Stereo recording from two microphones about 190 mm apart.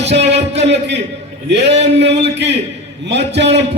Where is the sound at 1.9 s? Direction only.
65° right (ahead or behind).